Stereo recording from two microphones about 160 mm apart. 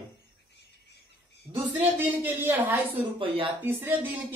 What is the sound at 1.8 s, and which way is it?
A woman's voice, 10° right (ahead or behind).